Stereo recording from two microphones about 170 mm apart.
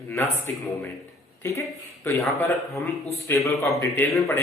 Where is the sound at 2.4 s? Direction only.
15° left (ahead or behind).